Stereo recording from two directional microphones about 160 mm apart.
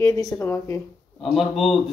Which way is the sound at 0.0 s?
20° left (ahead or behind).